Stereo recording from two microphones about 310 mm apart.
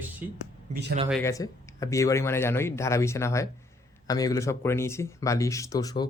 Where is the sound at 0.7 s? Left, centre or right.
Right.